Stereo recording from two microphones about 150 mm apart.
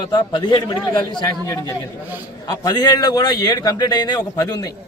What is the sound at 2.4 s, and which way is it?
Speech, 30° left (ahead or behind).